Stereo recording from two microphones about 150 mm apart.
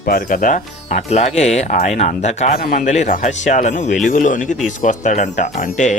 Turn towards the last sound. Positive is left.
turn(degrees=55)  # may be behind; listen again after turning